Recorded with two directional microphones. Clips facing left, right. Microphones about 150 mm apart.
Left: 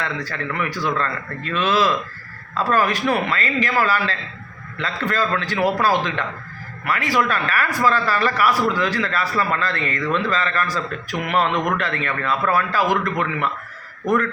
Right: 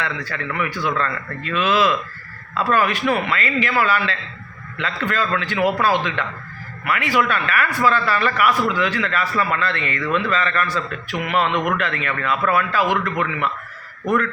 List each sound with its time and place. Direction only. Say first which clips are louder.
0.0 s a man's voice: even; 35° left (ahead or behind)